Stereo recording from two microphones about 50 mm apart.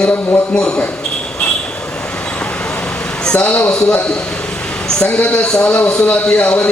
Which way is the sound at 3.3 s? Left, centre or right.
Left.